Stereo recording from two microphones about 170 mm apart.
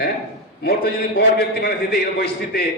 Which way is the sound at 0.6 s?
65° left (ahead or behind).